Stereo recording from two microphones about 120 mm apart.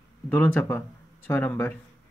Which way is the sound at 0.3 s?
15° left (ahead or behind).